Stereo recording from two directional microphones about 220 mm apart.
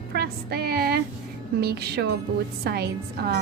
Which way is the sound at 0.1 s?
45° right (ahead or behind).